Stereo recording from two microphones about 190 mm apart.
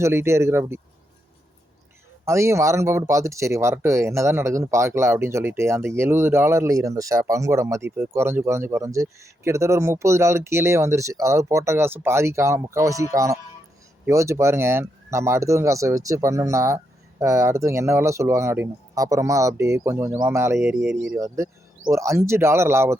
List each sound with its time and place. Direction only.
0.0 s speech: 15° right (ahead or behind)
2.2 s speech: 15° right (ahead or behind)